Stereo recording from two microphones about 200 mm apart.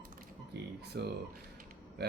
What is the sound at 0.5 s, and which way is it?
Music, 55° right (ahead or behind).